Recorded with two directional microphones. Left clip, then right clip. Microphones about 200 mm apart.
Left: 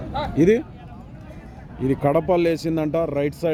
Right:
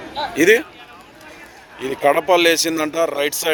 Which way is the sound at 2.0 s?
Centre (ahead or behind).